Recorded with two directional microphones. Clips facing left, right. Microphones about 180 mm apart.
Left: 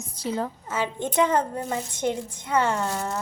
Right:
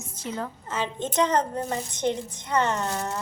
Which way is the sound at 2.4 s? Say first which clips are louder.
Left 2 dB; 10° left (ahead or behind).